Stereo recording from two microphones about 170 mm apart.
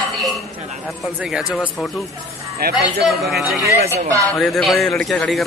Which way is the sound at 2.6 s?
65° right (ahead or behind).